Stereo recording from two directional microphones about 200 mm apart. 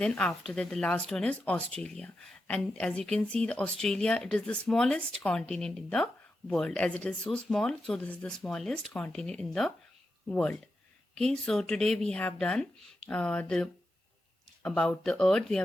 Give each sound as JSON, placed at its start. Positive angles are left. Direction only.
{"t": 0.0, "sound": "speech", "side_deg": 5}